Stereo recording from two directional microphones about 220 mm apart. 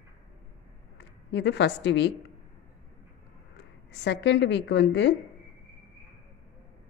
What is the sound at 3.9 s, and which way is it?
A woman's voice, 50° left (ahead or behind).